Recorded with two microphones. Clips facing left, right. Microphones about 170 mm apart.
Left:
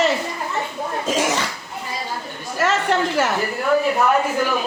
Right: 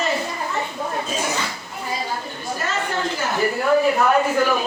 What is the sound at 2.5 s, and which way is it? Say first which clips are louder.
Speech: left 7 dB; 80° left.